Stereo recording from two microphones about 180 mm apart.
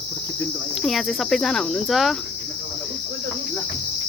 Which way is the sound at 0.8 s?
Centre (ahead or behind).